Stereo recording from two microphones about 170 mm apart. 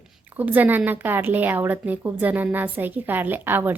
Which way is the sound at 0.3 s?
10° right (ahead or behind).